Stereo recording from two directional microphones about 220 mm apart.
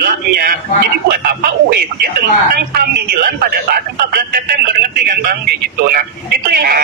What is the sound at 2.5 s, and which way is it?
Speech, 40° right (ahead or behind).